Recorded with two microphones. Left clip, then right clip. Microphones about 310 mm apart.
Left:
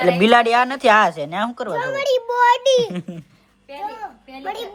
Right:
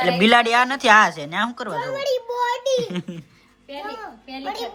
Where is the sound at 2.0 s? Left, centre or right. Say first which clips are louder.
Left 8 dB; left.